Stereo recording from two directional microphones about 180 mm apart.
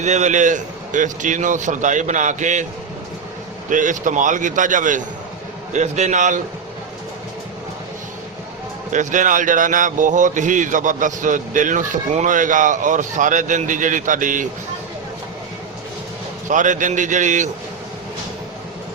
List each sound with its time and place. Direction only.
0.0 s speech: 40° right (ahead or behind)
3.7 s a man's voice: 45° right (ahead or behind)
8.9 s speech: 45° right (ahead or behind)
16.5 s speech: 45° right (ahead or behind)